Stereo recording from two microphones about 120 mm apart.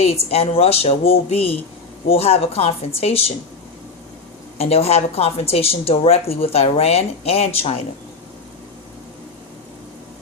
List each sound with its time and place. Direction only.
0.0 s speech: 60° left (ahead or behind)
4.5 s speech: 55° left (ahead or behind)